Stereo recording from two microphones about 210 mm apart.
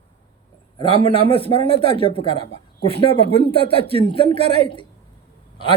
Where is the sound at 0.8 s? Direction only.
25° left (ahead or behind).